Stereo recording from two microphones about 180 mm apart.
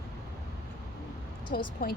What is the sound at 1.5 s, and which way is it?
Speech, 55° left (ahead or behind).